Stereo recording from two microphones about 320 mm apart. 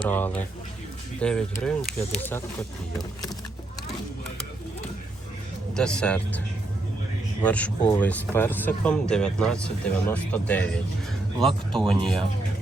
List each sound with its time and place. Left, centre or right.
0.1 s speech: centre
5.7 s speech: centre
7.4 s speech: centre